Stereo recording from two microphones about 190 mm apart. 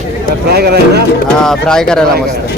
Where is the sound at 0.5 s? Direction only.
55° right (ahead or behind).